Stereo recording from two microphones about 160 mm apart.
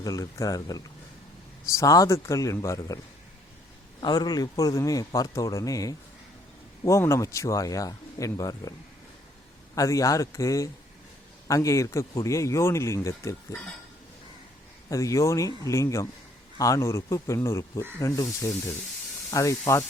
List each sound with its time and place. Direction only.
0.0 s speech: 20° left (ahead or behind)
4.0 s speech: 25° left (ahead or behind)
9.7 s speech: 20° left (ahead or behind)
14.8 s speech: 20° left (ahead or behind)